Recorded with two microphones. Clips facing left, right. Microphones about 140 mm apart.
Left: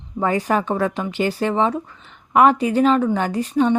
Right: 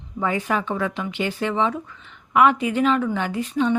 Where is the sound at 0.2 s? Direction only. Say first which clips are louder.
Left 4 dB; 40° left (ahead or behind).